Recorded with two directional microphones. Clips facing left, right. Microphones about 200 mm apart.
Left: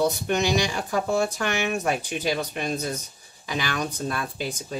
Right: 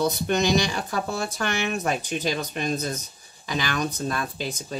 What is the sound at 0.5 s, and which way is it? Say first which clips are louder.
Speech: even; 10° left (ahead or behind).